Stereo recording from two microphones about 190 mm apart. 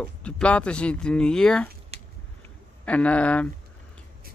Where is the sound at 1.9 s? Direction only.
30° right (ahead or behind).